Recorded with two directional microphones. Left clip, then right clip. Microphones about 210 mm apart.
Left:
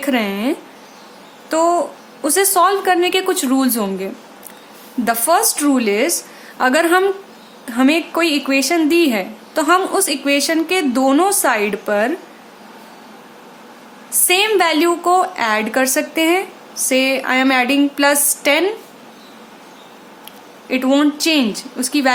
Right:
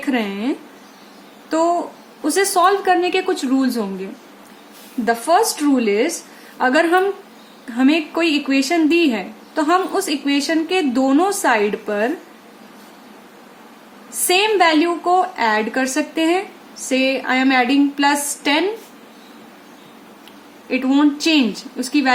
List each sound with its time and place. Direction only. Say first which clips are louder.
0.0 s a woman's voice: left 3 dB; 30° left (ahead or behind)
5.0 s a woman's voice: even; 35° left (ahead or behind)
14.3 s a woman's voice: even; 30° left (ahead or behind)
20.7 s a woman's voice: left 2 dB; 25° left (ahead or behind)